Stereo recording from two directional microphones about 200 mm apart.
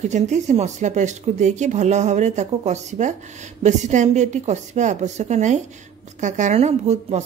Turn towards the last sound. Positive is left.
turn(degrees=-35)  # may be behind; listen again after turning